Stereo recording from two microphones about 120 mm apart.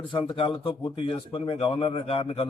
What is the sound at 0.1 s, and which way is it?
A man's voice, 45° left (ahead or behind).